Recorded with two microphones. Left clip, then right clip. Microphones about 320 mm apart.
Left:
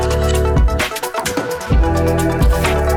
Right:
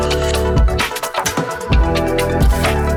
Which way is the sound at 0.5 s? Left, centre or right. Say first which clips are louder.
Even; centre.